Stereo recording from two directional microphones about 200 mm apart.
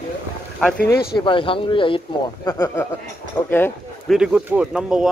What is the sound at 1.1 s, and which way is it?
Speech, 25° left (ahead or behind).